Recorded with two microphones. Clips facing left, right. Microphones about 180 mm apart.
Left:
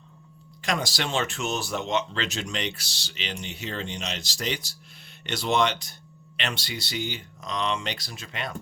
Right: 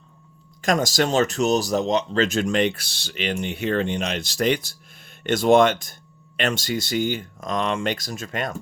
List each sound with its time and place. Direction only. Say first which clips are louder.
0.6 s speech: right 8 dB; 45° right (ahead or behind)